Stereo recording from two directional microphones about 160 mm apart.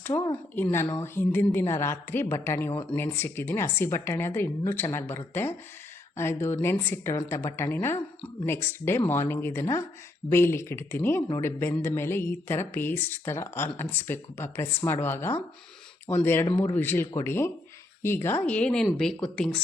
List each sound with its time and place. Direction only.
0.1 s speech: 25° left (ahead or behind)
0.5 s speech: 15° left (ahead or behind)
16.5 s speech: 30° left (ahead or behind)
16.7 s speech: 10° left (ahead or behind)